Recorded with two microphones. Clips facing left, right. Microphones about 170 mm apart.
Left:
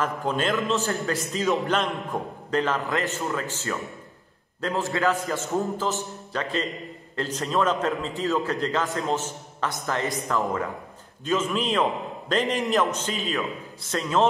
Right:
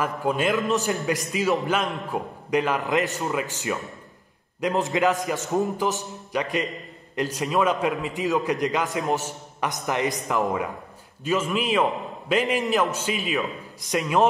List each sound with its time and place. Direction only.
0.0 s a man's voice: 10° right (ahead or behind)
0.7 s a man's voice: 15° right (ahead or behind)
1.4 s a man's voice: centre (ahead or behind)
11.2 s a man's voice: 5° right (ahead or behind)